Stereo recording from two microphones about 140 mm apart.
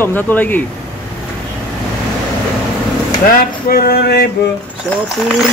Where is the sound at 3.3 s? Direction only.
90° left.